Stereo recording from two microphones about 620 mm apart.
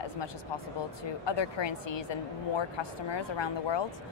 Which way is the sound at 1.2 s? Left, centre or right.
Left.